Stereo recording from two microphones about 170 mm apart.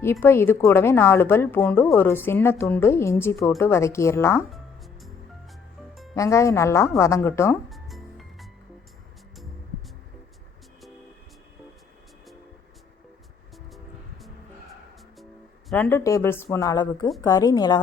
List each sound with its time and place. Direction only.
0.0 s a woman's voice: 15° left (ahead or behind)
4.5 s music: centre (ahead or behind)
6.1 s a woman's voice: 15° left (ahead or behind)
7.7 s music: centre (ahead or behind)
15.7 s a woman's voice: 10° left (ahead or behind)